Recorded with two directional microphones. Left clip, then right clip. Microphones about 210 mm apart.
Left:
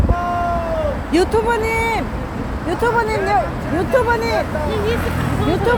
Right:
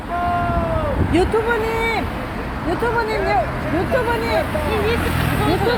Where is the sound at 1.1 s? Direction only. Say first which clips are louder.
Left 2 dB; 20° left (ahead or behind).